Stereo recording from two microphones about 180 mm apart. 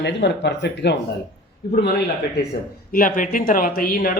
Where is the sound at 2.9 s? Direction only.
50° left (ahead or behind).